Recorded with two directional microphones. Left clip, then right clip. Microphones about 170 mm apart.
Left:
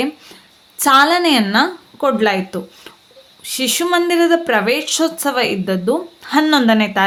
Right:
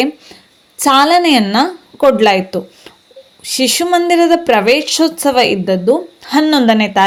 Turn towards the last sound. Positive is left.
turn(degrees=-15)  # may be behind; listen again after turning